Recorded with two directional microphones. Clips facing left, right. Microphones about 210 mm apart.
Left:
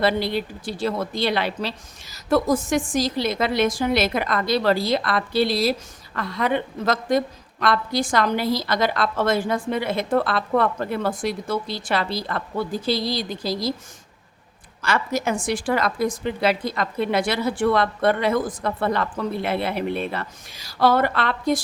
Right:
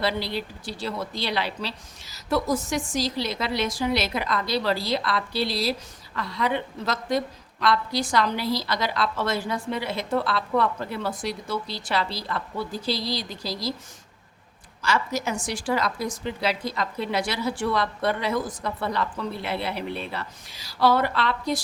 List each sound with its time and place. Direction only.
0.0 s a woman's voice: 50° left (ahead or behind)
14.8 s a woman's voice: 55° left (ahead or behind)